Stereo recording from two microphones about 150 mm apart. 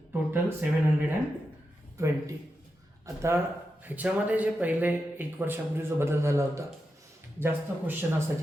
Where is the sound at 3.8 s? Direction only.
10° right (ahead or behind).